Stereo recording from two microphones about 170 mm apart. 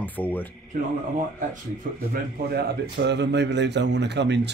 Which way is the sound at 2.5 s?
85° right.